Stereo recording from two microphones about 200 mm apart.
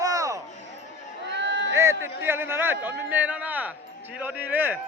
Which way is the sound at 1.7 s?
15° right (ahead or behind).